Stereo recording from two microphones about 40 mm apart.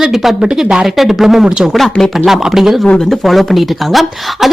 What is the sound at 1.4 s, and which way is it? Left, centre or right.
Speech, right.